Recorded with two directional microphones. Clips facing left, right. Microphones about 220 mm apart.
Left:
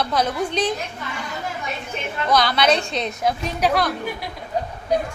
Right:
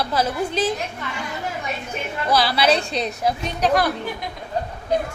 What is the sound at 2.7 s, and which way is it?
Speech, 35° right (ahead or behind).